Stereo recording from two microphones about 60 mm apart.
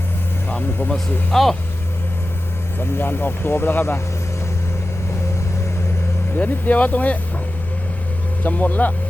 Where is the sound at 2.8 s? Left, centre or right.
Left.